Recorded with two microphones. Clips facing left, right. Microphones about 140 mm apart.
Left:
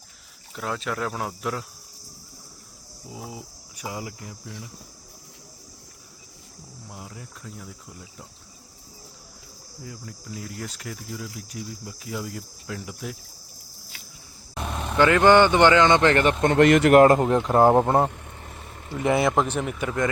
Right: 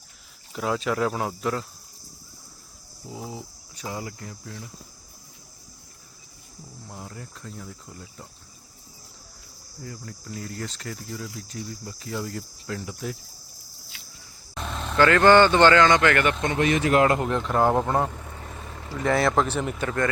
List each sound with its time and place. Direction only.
0.5 s cricket: centre (ahead or behind)
3.1 s speech: 5° left (ahead or behind)
6.8 s cricket: 5° left (ahead or behind)
9.8 s cricket: 5° left (ahead or behind)
14.5 s speech: 10° left (ahead or behind); by 16.3 s 30° left (ahead or behind)
16.6 s a man's voice: 80° left
17.0 s speech: 35° left (ahead or behind)
18.1 s vehicle: 50° right (ahead or behind)
18.9 s speech: 15° left (ahead or behind)